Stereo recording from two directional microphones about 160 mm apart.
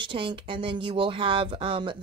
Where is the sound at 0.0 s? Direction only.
30° right (ahead or behind).